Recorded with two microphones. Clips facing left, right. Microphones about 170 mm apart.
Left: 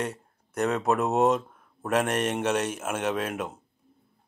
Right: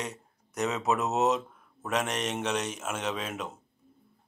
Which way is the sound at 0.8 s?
55° left (ahead or behind).